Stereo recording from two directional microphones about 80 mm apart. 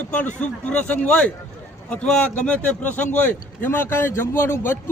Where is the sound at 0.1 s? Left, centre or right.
Centre.